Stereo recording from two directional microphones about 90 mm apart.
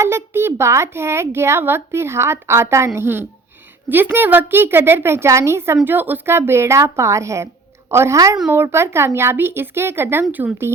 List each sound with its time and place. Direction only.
0.0 s a woman's voice: 25° right (ahead or behind)